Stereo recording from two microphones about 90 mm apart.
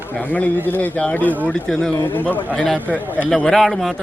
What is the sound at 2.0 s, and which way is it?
A man's voice, 20° left (ahead or behind).